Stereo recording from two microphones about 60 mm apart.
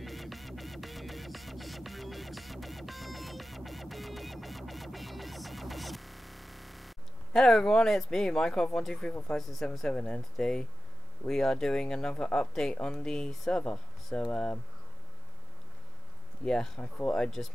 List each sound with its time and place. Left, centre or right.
0.0 s music: centre
7.3 s speech: centre
9.8 s speech: centre
13.5 s speech: centre
16.4 s speech: centre